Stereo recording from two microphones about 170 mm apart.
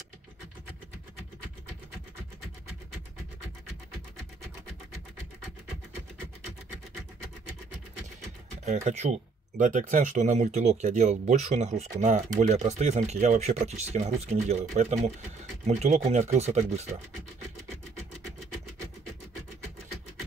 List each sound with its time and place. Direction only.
8.6 s speech: 45° right (ahead or behind)